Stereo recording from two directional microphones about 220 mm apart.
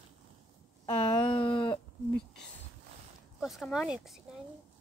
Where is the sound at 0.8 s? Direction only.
20° left (ahead or behind).